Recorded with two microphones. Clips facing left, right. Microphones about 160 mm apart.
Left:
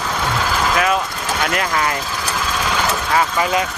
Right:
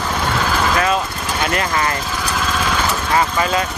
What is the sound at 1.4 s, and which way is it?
Speech, centre (ahead or behind).